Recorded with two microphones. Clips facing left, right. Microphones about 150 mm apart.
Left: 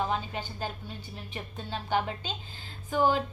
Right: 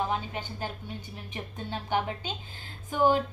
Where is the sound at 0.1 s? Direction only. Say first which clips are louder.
Even; 15° right (ahead or behind).